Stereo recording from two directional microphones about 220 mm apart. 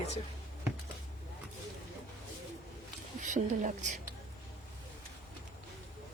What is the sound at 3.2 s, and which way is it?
Speech, 35° right (ahead or behind).